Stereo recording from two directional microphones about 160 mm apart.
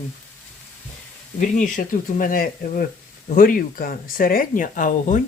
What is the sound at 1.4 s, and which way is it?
Speech, 55° left (ahead or behind).